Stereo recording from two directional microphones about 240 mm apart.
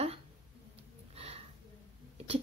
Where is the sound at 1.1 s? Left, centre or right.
Right.